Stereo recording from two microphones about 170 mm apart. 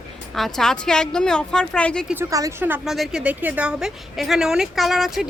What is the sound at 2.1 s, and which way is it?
A woman's voice, 15° right (ahead or behind).